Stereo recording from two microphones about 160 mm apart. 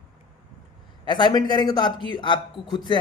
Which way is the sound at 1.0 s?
30° left (ahead or behind).